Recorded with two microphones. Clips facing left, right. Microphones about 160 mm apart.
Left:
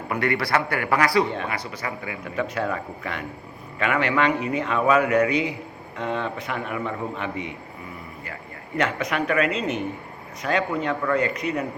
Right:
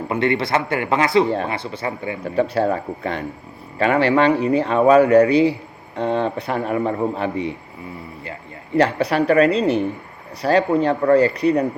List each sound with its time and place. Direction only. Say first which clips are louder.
0.1 s speech: right 4 dB; 25° right (ahead or behind)